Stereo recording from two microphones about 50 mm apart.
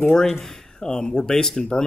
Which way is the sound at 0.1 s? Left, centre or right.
Centre.